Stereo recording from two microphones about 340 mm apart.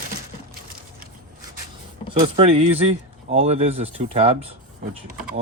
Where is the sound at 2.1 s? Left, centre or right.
Centre.